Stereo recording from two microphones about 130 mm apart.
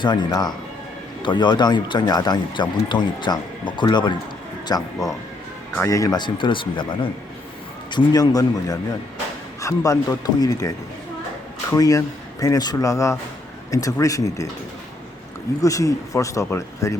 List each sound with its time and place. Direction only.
0.0 s speech: 35° left (ahead or behind)
4.7 s speech: 25° left (ahead or behind)
15.6 s speech: 25° left (ahead or behind)